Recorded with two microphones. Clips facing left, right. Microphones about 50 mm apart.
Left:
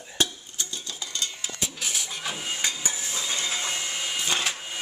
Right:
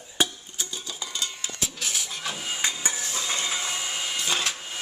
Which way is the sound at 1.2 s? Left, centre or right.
Centre.